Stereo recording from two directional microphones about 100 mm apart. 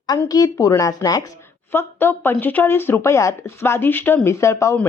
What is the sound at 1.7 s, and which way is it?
A woman's voice, 20° left (ahead or behind).